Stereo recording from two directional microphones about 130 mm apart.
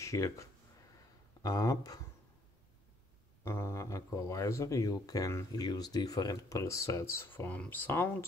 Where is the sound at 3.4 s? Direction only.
20° left (ahead or behind).